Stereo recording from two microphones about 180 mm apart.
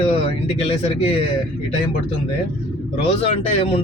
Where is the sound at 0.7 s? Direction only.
30° left (ahead or behind).